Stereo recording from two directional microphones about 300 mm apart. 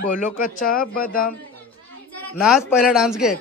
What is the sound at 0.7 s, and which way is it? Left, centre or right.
Speech, left.